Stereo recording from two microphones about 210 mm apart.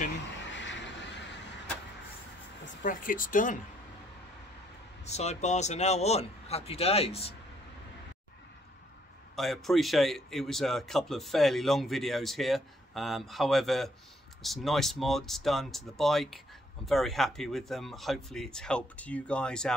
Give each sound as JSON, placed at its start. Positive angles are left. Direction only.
{"t": 0.6, "sound": "vehicle", "side_deg": 60}
{"t": 2.8, "sound": "speech", "side_deg": 40}
{"t": 5.0, "sound": "speech", "side_deg": 30}
{"t": 9.3, "sound": "speech", "side_deg": 0}